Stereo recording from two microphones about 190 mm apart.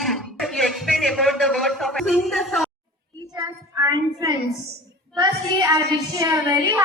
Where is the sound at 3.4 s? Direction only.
15° right (ahead or behind).